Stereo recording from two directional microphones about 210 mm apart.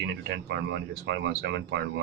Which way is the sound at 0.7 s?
55° right (ahead or behind).